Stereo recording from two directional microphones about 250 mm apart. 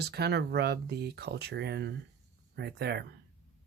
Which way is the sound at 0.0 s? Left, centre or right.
Right.